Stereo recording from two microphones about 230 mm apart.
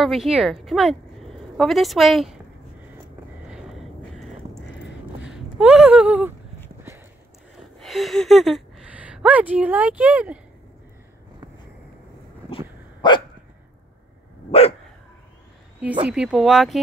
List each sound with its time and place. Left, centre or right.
0.0 s speech: centre
3.4 s a sound: centre
5.2 s speech: centre
7.5 s speech: centre
12.4 s dog: left
16.1 s speech: centre